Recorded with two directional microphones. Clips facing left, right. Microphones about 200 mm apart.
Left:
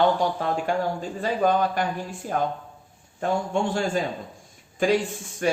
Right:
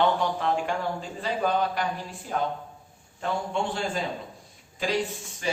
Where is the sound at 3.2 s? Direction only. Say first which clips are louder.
Left 4 dB; 45° left (ahead or behind).